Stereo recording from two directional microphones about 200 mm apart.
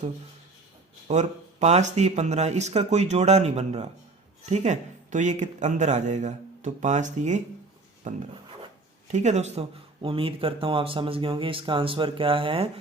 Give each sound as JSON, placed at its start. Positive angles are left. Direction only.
{"t": 1.0, "sound": "speech", "side_deg": -35}